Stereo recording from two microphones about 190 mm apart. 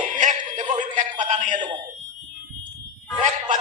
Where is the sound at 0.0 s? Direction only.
40° right (ahead or behind).